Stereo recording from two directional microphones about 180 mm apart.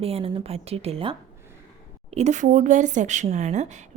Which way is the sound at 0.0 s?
35° right (ahead or behind).